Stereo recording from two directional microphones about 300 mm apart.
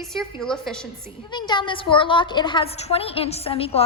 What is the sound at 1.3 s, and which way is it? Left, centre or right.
A woman's voice, centre.